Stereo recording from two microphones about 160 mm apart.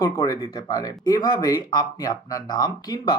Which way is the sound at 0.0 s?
20° left (ahead or behind).